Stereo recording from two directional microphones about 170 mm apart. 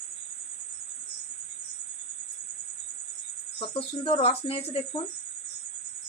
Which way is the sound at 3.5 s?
30° left (ahead or behind).